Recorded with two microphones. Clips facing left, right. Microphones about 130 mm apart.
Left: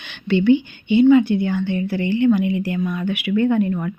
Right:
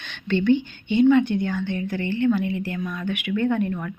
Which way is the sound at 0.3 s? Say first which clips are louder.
Left 4 dB; 10° left (ahead or behind).